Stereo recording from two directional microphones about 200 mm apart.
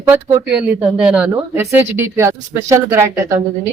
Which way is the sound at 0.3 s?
10° right (ahead or behind).